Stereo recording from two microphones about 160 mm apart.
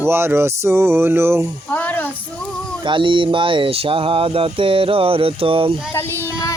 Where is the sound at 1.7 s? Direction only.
10° left (ahead or behind).